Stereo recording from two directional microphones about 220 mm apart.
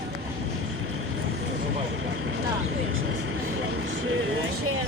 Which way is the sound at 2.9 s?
65° right (ahead or behind).